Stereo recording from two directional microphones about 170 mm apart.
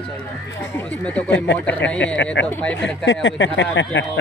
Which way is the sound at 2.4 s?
10° left (ahead or behind).